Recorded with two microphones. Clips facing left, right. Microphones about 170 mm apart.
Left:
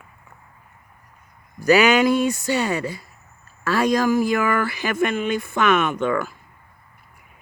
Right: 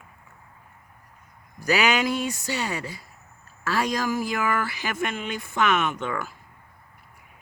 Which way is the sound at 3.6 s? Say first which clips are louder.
Left 6 dB; 55° left (ahead or behind).